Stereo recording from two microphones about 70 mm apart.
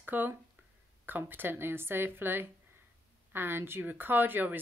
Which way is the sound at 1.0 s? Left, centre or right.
Right.